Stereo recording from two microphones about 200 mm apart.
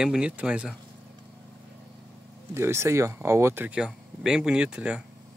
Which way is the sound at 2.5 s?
15° right (ahead or behind).